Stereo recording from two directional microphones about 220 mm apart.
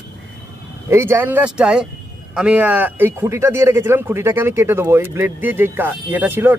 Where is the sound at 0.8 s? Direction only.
10° right (ahead or behind).